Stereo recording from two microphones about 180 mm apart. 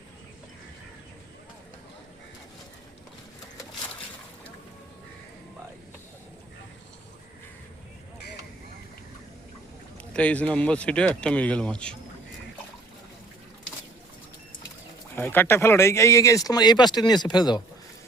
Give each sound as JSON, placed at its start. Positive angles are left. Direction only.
{"t": 10.1, "sound": "speech", "side_deg": 5}
{"t": 15.1, "sound": "speech", "side_deg": 10}